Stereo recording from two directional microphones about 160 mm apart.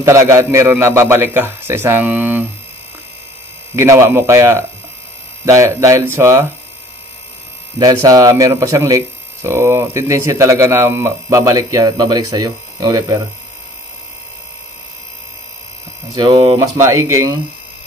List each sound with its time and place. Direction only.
0.0 s a man's voice: 20° right (ahead or behind)
3.7 s a man's voice: 15° right (ahead or behind)
7.8 s speech: 20° right (ahead or behind)
16.2 s speech: 30° right (ahead or behind)